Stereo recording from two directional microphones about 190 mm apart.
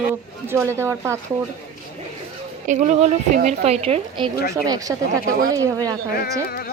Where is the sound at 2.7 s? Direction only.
40° right (ahead or behind); by 5.9 s 15° right (ahead or behind).